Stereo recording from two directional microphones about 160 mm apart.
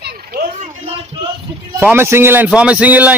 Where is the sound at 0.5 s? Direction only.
40° right (ahead or behind).